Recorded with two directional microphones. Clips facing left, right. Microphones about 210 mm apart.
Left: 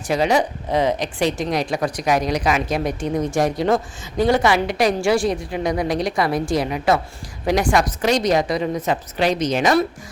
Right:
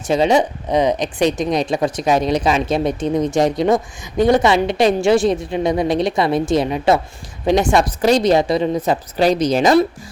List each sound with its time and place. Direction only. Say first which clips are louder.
0.1 s a woman's voice: right 4 dB; 25° right (ahead or behind)